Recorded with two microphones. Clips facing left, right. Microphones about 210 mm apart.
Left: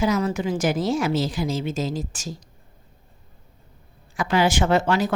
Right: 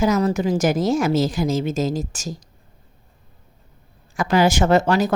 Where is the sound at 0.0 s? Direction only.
40° right (ahead or behind).